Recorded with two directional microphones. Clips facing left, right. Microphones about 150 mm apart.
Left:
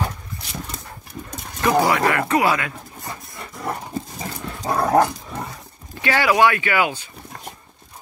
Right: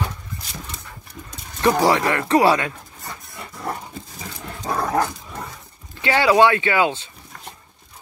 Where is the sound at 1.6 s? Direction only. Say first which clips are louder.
Even; 25° right (ahead or behind).